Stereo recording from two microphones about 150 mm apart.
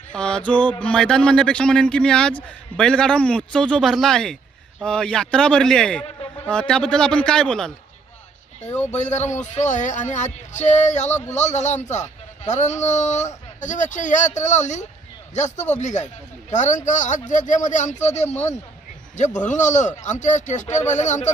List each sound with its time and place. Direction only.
0.1 s speech: 5° left (ahead or behind)
8.9 s a man's voice: 50° left (ahead or behind)